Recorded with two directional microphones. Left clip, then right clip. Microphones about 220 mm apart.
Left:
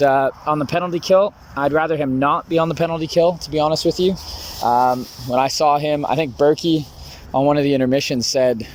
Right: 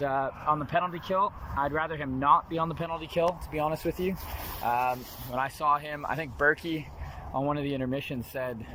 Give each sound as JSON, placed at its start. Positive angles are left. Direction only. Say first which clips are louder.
{"t": 0.0, "sound": "speech", "louder": "left 13 dB", "side_deg": 55}
{"t": 5.3, "sound": "speech", "louder": "left 11 dB", "side_deg": 45}
{"t": 6.4, "sound": "speech", "louder": "left 9 dB", "side_deg": 30}
{"t": 7.3, "sound": "speech", "louder": "left 14 dB", "side_deg": 40}